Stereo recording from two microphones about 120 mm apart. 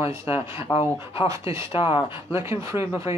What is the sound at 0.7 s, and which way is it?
Speech, 50° left (ahead or behind).